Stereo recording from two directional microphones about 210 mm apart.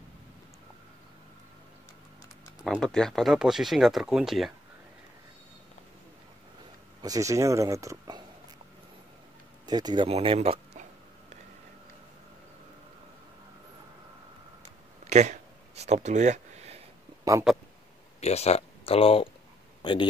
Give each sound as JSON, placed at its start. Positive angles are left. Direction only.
{"t": 2.6, "sound": "speech", "side_deg": 0}
{"t": 7.0, "sound": "speech", "side_deg": -15}
{"t": 9.7, "sound": "speech", "side_deg": -20}
{"t": 14.6, "sound": "a sound", "side_deg": -35}
{"t": 17.2, "sound": "a sound", "side_deg": -15}
{"t": 18.2, "sound": "speech", "side_deg": 30}